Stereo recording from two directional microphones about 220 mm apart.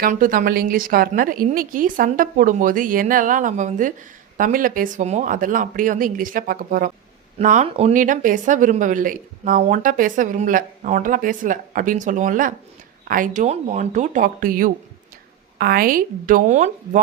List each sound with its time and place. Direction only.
0.0 s speech: 40° right (ahead or behind)